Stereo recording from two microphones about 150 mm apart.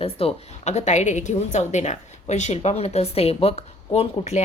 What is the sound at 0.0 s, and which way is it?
A woman's voice, 40° left (ahead or behind).